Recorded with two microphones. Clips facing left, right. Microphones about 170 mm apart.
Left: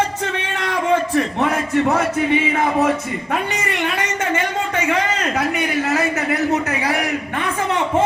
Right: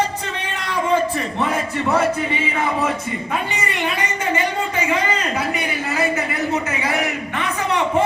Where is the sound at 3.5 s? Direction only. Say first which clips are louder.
Left 1 dB; 65° left (ahead or behind).